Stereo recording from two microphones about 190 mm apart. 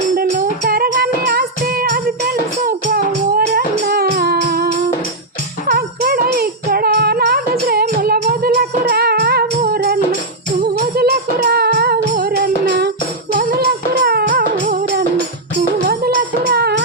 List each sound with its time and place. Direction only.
0.2 s music: 50° right (ahead or behind)
14.0 s music: 55° right (ahead or behind)
15.9 s music: 55° right (ahead or behind)